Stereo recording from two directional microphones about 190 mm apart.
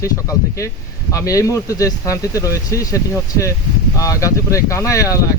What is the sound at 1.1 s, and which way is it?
Speech, 15° left (ahead or behind).